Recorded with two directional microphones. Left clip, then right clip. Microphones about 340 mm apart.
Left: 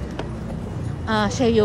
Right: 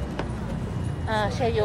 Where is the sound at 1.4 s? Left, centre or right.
Left.